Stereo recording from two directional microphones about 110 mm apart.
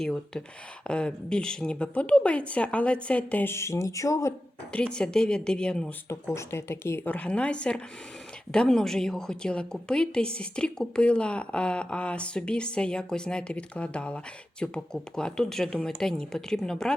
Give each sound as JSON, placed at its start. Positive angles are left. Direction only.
{"t": 0.0, "sound": "a woman's voice", "side_deg": 5}
{"t": 4.7, "sound": "a woman's voice", "side_deg": 10}
{"t": 6.3, "sound": "a woman's voice", "side_deg": 20}